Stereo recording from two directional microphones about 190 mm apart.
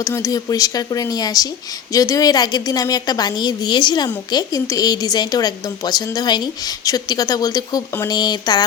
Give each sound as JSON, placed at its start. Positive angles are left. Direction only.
{"t": 0.0, "sound": "a woman's voice", "side_deg": 15}